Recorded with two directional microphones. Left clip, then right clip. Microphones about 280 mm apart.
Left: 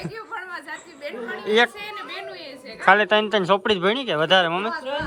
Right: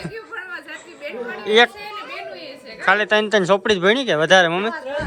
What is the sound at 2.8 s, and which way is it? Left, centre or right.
Speech, centre.